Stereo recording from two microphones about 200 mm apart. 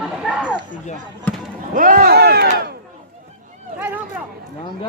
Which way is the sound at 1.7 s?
45° right (ahead or behind).